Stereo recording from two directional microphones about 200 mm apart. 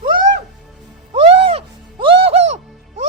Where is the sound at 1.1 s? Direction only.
30° right (ahead or behind).